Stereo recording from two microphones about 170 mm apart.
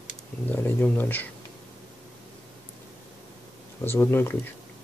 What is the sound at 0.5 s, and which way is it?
Speech, 10° left (ahead or behind).